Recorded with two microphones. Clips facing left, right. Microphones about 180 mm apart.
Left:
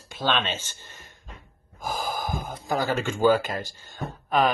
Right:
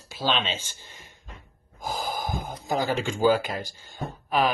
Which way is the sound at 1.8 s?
20° right (ahead or behind).